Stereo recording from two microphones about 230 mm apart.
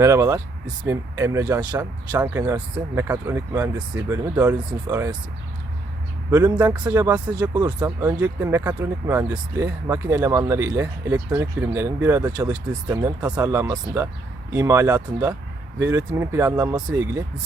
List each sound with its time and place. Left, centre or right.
0.0 s speech: centre
6.3 s speech: centre
6.7 s speech: centre